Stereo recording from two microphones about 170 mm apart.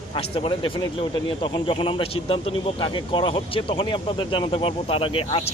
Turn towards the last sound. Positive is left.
turn(degrees=30)  # may be behind; listen again after turning